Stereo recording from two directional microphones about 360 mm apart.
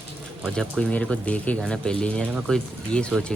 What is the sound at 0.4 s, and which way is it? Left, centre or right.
Speech, centre.